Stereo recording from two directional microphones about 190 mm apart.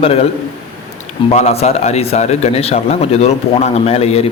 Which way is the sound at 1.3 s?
35° left (ahead or behind).